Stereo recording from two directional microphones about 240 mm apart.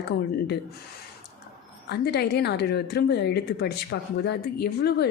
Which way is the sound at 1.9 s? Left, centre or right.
Left.